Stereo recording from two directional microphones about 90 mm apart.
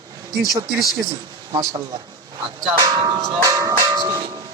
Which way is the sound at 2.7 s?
40° right (ahead or behind).